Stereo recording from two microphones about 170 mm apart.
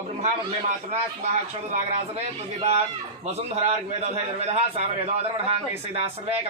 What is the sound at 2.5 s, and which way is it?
A man's voice, 40° right (ahead or behind).